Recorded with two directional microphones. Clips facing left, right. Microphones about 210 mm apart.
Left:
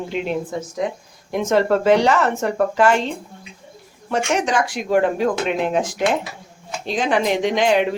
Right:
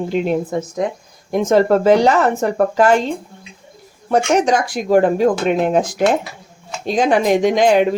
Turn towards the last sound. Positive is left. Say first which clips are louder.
# right 5 dB
turn(degrees=-40)  # may be behind; listen again after turning